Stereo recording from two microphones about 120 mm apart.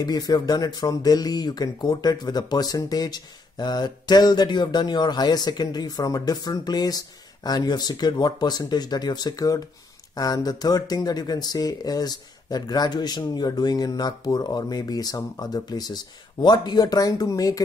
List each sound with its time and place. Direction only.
0.0 s speech: 35° left (ahead or behind)